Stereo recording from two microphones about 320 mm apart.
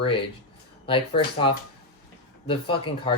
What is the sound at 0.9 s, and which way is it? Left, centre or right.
Speech, centre.